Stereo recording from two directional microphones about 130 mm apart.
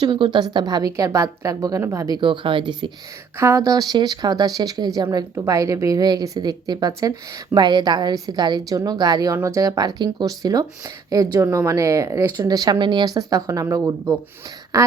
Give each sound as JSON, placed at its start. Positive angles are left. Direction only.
{"t": 0.0, "sound": "a woman's voice", "side_deg": -35}
{"t": 3.3, "sound": "a woman's voice", "side_deg": -25}
{"t": 14.7, "sound": "a sound", "side_deg": -25}